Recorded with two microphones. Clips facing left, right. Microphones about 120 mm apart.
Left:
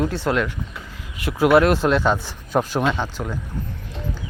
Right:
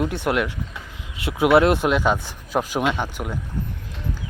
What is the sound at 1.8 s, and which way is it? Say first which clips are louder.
Speech: left 1 dB; 10° right (ahead or behind).